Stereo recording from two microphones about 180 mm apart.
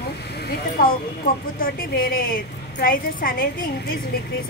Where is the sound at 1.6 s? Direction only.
55° left (ahead or behind).